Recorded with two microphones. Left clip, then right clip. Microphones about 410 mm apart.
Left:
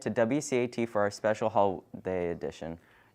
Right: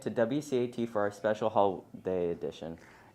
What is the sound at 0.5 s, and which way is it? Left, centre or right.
Speech, left.